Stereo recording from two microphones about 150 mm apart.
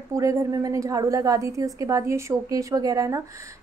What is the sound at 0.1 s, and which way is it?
A woman's voice, 20° right (ahead or behind).